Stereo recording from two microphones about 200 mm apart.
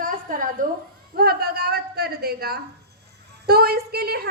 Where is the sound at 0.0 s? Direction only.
45° right (ahead or behind).